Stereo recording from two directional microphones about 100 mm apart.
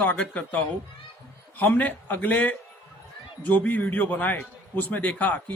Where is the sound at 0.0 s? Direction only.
15° left (ahead or behind).